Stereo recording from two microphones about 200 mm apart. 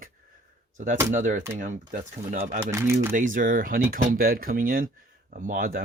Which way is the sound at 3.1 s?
40° right (ahead or behind).